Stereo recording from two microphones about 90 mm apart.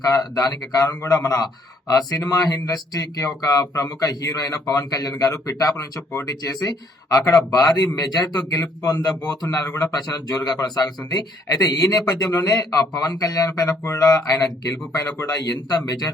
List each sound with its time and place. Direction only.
0.0 s speech: 40° left (ahead or behind)
6.1 s speech: 30° left (ahead or behind)
6.4 s speech: 45° left (ahead or behind)